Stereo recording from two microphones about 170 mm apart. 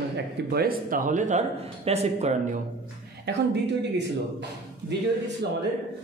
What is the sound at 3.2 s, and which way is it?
Speech, 85° right.